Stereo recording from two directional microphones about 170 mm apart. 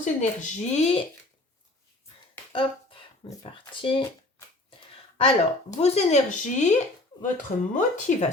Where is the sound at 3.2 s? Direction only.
30° left (ahead or behind).